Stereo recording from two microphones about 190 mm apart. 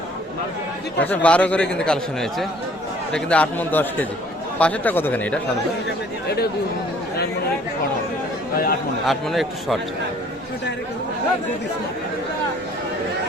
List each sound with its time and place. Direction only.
0.9 s speech: 10° left (ahead or behind)
3.1 s speech: 5° left (ahead or behind)
6.2 s speech: 55° left (ahead or behind)
9.0 s a man's voice: centre (ahead or behind)